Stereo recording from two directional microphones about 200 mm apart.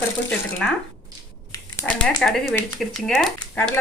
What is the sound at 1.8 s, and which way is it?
Speech, 5° left (ahead or behind).